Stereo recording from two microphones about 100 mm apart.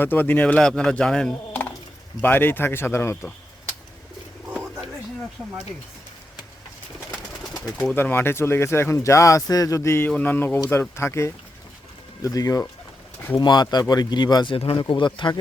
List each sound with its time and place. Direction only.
0.0 s a man's voice: 20° left (ahead or behind)
2.2 s speech: 20° left (ahead or behind)
7.9 s speech: 20° left (ahead or behind)
10.1 s speech: 15° left (ahead or behind); by 12.6 s 35° left (ahead or behind)
13.3 s speech: 45° left (ahead or behind)
14.5 s speech: 60° left (ahead or behind)